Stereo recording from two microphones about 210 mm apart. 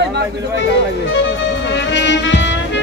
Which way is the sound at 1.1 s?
55° left (ahead or behind).